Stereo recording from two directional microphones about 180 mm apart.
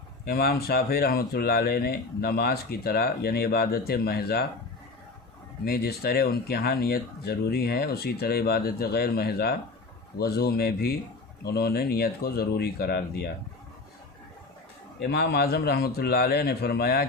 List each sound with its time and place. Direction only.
0.3 s speech: 60° left (ahead or behind)
5.6 s speech: 60° left (ahead or behind)
15.1 s speech: 65° left (ahead or behind)